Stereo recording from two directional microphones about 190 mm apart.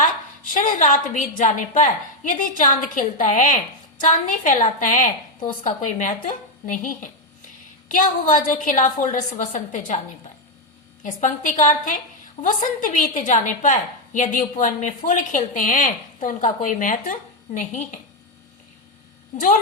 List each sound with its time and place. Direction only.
0.5 s a woman's voice: 40° left (ahead or behind)
11.0 s a woman's voice: 45° left (ahead or behind)
19.3 s a woman's voice: 35° left (ahead or behind)